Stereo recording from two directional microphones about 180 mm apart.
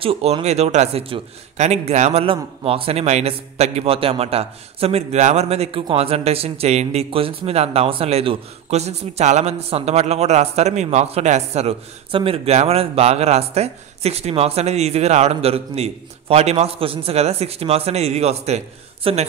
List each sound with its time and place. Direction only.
0.0 s a man's voice: 35° right (ahead or behind)